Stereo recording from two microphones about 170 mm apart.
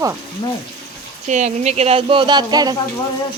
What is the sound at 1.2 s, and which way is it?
Speech, 45° right (ahead or behind).